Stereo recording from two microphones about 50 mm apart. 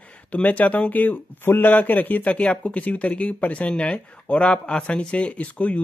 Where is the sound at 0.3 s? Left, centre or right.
Left.